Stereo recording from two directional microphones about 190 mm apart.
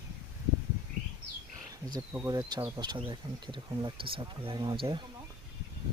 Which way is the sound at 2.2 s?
20° right (ahead or behind).